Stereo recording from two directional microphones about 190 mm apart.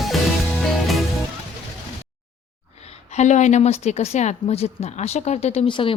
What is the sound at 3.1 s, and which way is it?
A woman's voice, 40° left (ahead or behind).